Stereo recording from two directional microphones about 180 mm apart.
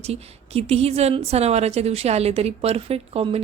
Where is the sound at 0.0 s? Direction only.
35° right (ahead or behind).